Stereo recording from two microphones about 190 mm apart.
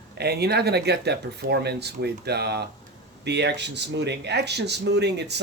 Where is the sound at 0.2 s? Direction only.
60° right (ahead or behind).